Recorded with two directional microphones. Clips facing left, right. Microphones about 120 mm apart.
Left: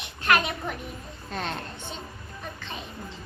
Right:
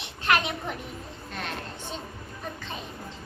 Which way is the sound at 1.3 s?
35° left (ahead or behind).